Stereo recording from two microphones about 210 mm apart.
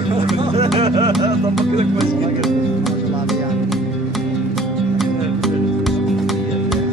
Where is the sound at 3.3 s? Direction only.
Centre (ahead or behind).